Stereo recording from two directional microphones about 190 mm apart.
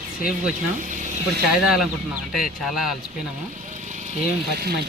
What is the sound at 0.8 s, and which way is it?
Snake, 40° right (ahead or behind).